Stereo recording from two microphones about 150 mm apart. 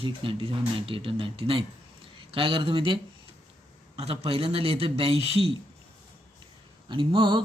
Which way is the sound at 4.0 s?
40° right (ahead or behind).